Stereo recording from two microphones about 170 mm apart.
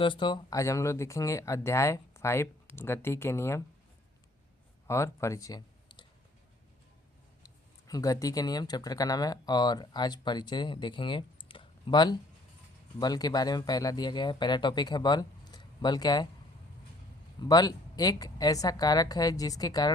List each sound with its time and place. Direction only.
0.0 s speech: 30° left (ahead or behind)
4.9 s speech: 15° left (ahead or behind)
7.4 s speech: 20° left (ahead or behind)
17.5 s speech: 25° left (ahead or behind)